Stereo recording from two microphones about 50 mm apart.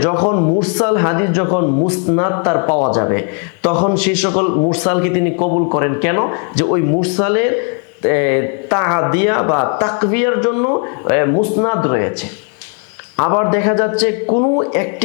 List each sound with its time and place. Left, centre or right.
0.0 s speech: left
13.1 s speech: left